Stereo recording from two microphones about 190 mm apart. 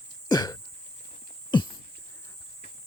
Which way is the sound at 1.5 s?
25° left (ahead or behind).